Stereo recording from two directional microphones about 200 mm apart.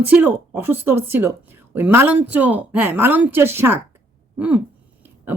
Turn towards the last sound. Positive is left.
turn(degrees=-10)  # may be behind; listen again after turning